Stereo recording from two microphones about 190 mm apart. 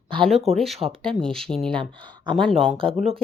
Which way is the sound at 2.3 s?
Centre (ahead or behind).